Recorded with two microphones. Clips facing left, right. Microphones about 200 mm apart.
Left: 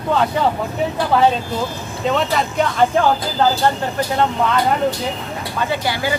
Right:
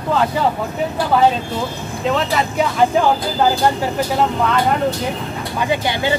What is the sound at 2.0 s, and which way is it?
Speech, centre (ahead or behind).